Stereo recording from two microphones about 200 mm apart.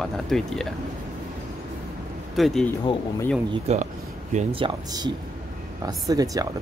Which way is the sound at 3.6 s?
35° right (ahead or behind).